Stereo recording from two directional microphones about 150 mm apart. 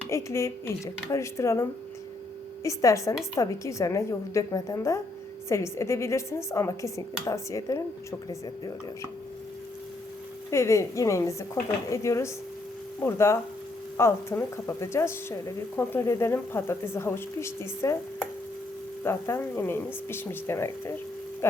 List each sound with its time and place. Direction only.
0.1 s a woman's voice: 20° left (ahead or behind)
2.6 s a woman's voice: 20° left (ahead or behind)
10.5 s a woman's voice: 20° left (ahead or behind)
19.0 s a woman's voice: 15° left (ahead or behind)